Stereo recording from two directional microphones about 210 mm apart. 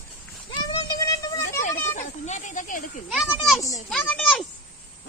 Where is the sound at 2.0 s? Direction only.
35° left (ahead or behind).